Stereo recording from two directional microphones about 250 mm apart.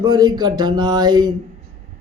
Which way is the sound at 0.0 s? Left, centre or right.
Centre.